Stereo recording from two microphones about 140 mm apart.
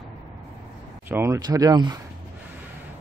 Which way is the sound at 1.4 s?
25° right (ahead or behind).